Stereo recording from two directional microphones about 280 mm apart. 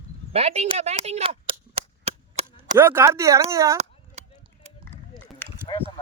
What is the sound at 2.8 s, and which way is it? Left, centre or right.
Speech, centre.